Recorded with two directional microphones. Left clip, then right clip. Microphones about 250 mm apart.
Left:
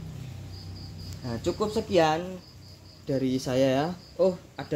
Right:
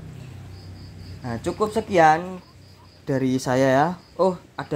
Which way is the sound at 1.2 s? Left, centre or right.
Centre.